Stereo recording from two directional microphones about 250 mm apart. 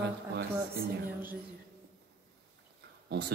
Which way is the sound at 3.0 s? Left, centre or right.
Right.